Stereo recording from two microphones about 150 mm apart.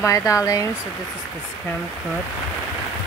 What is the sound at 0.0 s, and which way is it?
Speech, 20° left (ahead or behind).